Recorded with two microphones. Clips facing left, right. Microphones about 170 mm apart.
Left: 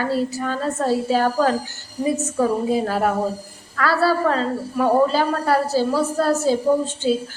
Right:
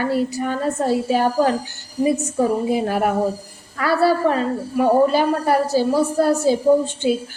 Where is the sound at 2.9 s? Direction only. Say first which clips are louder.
Right 1 dB; 15° right (ahead or behind).